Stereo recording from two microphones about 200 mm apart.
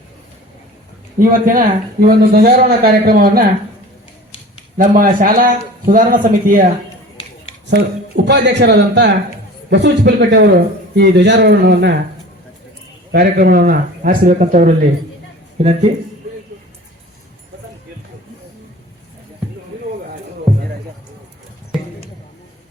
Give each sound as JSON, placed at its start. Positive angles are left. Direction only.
{"t": 1.2, "sound": "speech", "side_deg": -40}
{"t": 4.8, "sound": "speech", "side_deg": -45}
{"t": 7.7, "sound": "a man's voice", "side_deg": -60}
{"t": 13.1, "sound": "speech", "side_deg": -50}
{"t": 15.5, "sound": "speech", "side_deg": -30}